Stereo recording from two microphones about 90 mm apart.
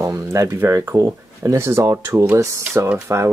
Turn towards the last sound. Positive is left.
turn(degrees=-35)  # may be behind; listen again after turning